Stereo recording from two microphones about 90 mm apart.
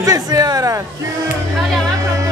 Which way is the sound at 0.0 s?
45° right (ahead or behind).